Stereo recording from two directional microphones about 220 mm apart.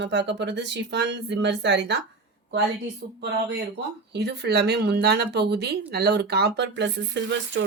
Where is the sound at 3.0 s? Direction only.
50° right (ahead or behind).